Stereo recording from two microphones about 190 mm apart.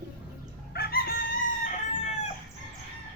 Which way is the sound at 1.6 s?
40° left (ahead or behind).